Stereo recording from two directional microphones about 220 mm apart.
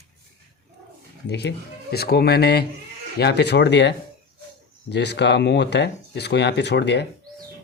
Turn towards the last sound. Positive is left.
turn(degrees=50)  # may be behind; listen again after turning